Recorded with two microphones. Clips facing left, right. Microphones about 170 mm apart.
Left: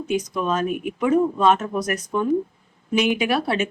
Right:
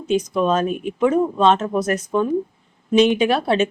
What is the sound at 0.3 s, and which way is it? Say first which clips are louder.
Speech: right 4 dB; 25° right (ahead or behind).